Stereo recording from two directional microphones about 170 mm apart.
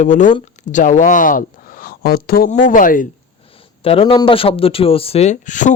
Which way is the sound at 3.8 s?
35° left (ahead or behind).